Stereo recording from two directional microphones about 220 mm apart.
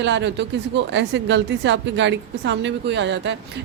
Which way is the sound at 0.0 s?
55° right (ahead or behind).